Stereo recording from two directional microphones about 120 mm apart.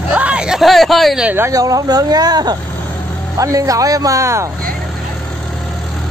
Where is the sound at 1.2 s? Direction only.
20° right (ahead or behind).